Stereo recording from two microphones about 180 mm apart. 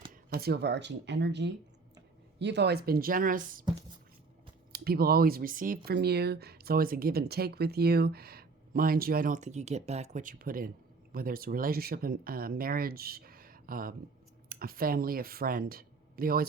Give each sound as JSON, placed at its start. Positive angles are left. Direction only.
{"t": 0.1, "sound": "speech", "side_deg": -60}
{"t": 4.7, "sound": "speech", "side_deg": -60}